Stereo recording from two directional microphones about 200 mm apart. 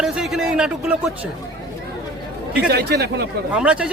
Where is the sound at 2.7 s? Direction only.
55° right (ahead or behind).